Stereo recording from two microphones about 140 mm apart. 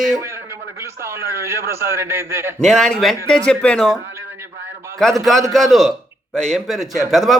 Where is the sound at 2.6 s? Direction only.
5° left (ahead or behind).